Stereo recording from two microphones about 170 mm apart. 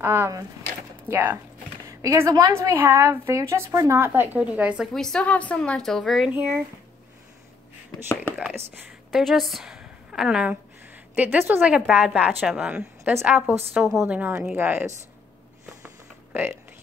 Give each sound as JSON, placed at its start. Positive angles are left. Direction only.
{"t": 0.0, "sound": "a woman's voice", "side_deg": -15}
{"t": 4.9, "sound": "a woman's voice", "side_deg": 5}
{"t": 8.4, "sound": "a woman's voice", "side_deg": -10}